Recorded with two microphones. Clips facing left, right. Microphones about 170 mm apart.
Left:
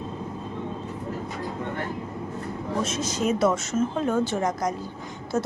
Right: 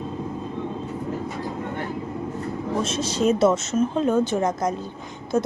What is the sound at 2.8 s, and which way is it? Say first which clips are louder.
A woman's voice: right 5 dB; 30° right (ahead or behind).